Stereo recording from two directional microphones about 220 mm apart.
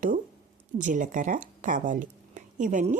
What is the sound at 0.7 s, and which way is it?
A woman's voice, 35° right (ahead or behind).